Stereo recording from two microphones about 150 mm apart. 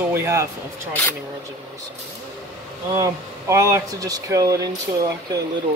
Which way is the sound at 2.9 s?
20° right (ahead or behind).